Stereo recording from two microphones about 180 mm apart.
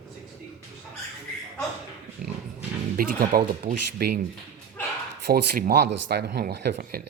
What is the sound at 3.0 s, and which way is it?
Speech, 55° right (ahead or behind).